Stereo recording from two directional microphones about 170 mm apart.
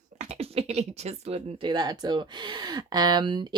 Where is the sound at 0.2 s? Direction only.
35° right (ahead or behind).